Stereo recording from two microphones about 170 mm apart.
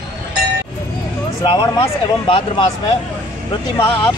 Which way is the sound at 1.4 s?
30° left (ahead or behind).